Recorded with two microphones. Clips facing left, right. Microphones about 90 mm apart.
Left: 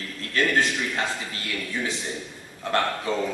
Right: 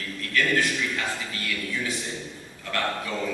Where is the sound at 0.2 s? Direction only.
25° left (ahead or behind).